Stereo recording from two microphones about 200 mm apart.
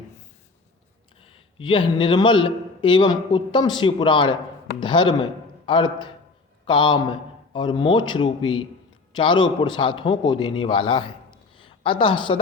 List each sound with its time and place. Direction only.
1.2 s a man's voice: 25° left (ahead or behind)